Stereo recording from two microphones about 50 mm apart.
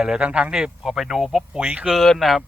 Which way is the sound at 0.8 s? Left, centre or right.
Centre.